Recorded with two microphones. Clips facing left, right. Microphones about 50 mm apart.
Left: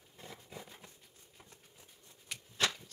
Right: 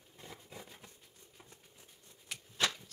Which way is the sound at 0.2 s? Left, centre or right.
Centre.